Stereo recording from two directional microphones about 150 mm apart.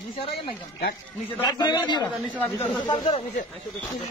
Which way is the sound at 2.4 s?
10° left (ahead or behind).